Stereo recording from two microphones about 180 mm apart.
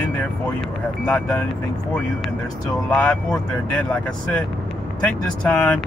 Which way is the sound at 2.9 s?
5° left (ahead or behind).